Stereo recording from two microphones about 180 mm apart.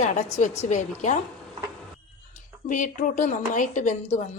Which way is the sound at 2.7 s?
45° left (ahead or behind).